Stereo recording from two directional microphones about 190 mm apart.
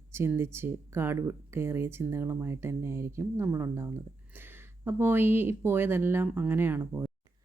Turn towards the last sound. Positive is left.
turn(degrees=-10)  # may be behind; listen again after turning